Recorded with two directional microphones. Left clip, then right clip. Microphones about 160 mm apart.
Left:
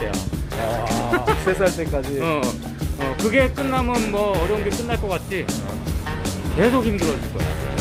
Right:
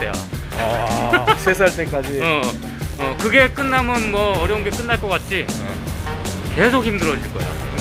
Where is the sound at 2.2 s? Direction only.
20° left (ahead or behind).